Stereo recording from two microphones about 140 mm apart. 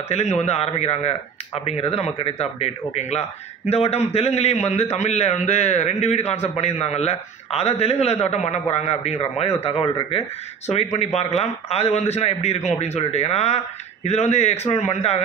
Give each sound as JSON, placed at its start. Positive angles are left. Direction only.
{"t": 0.1, "sound": "speech", "side_deg": 50}